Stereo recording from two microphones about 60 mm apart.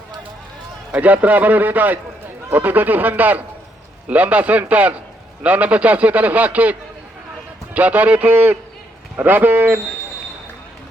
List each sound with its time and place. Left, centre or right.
0.9 s a man's voice: right